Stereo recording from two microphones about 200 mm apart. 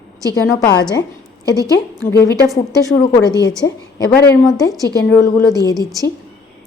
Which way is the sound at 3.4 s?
20° left (ahead or behind).